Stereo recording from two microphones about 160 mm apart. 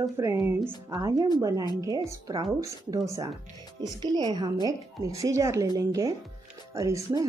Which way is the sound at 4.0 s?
25° right (ahead or behind).